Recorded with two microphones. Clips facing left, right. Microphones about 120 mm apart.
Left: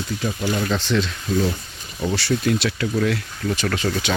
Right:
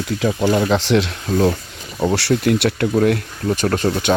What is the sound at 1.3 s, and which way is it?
Speech, 55° right (ahead or behind).